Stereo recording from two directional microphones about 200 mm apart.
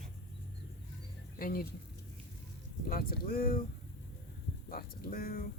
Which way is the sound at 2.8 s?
45° left (ahead or behind).